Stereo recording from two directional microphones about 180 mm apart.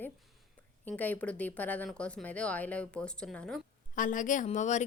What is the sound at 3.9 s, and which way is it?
Speech, 45° left (ahead or behind).